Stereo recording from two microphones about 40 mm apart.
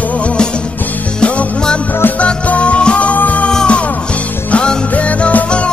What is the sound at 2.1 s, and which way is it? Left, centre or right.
Music, left.